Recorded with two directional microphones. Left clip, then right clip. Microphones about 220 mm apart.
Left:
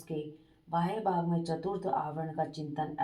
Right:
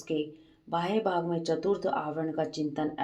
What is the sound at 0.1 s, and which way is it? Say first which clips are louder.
Speech: right 7 dB; 45° right (ahead or behind).